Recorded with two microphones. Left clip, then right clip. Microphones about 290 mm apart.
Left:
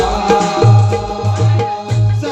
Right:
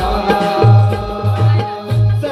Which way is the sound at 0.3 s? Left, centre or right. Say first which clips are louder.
Even; left.